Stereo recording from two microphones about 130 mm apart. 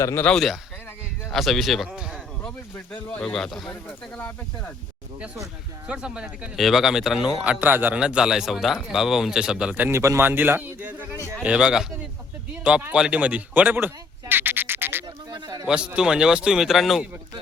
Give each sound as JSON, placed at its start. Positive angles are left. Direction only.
{"t": 0.0, "sound": "speech", "side_deg": 20}
{"t": 0.3, "sound": "a man's voice", "side_deg": 0}
{"t": 2.4, "sound": "speech", "side_deg": 10}
{"t": 3.7, "sound": "speech", "side_deg": 15}
{"t": 5.9, "sound": "a man's voice", "side_deg": -5}
{"t": 11.4, "sound": "a man's voice", "side_deg": -5}
{"t": 15.0, "sound": "a sound", "side_deg": -35}
{"t": 15.6, "sound": "speech", "side_deg": -5}